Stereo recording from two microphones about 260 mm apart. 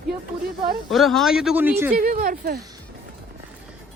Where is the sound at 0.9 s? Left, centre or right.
Centre.